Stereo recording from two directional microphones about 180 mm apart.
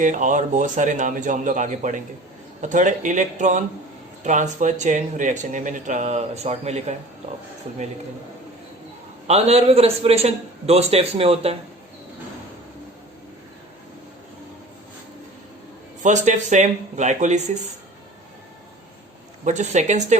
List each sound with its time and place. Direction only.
0.0 s speech: 45° right (ahead or behind)
9.2 s a man's voice: 35° right (ahead or behind)
16.0 s a man's voice: 40° right (ahead or behind)
19.5 s a man's voice: 40° right (ahead or behind)